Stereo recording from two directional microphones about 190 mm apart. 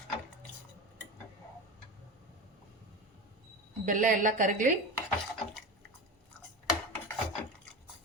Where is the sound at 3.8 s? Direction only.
45° right (ahead or behind).